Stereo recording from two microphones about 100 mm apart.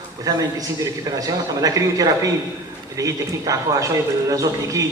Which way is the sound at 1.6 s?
35° right (ahead or behind).